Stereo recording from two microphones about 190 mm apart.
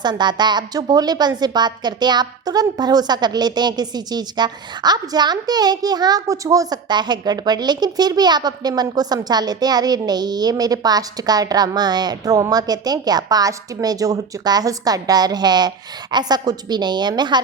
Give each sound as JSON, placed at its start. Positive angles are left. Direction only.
{"t": 0.0, "sound": "a woman's voice", "side_deg": -20}